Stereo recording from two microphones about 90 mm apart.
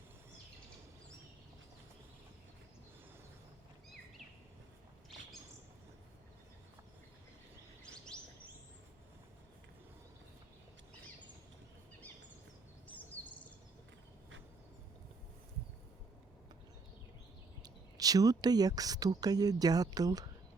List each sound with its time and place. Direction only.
8.1 s bird: 10° left (ahead or behind)
17.6 s speech: 45° right (ahead or behind)